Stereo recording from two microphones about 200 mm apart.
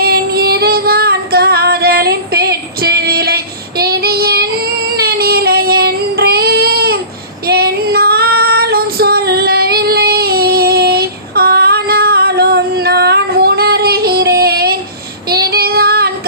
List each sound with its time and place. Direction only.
0.0 s child singing: 50° right (ahead or behind)